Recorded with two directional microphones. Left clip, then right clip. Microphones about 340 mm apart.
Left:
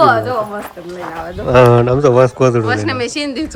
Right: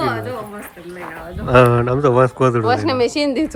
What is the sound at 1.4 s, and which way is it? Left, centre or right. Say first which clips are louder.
Speech: left 4 dB; centre.